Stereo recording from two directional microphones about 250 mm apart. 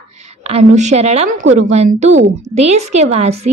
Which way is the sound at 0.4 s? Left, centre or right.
Right.